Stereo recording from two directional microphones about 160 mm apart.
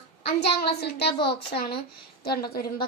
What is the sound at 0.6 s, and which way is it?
Speech, 90° left.